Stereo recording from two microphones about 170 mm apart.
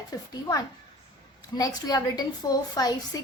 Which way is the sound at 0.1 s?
20° left (ahead or behind).